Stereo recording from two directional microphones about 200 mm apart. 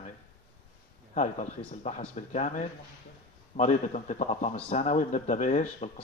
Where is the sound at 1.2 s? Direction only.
35° left (ahead or behind).